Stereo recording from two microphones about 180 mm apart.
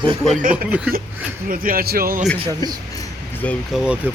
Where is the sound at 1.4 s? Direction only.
50° right (ahead or behind).